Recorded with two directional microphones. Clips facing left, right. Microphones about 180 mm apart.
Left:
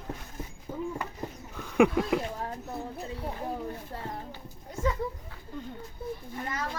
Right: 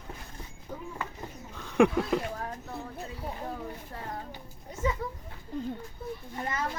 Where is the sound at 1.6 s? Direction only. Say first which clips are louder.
Even; 5° left (ahead or behind).